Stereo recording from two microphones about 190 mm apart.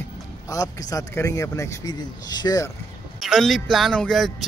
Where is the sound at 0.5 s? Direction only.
20° left (ahead or behind).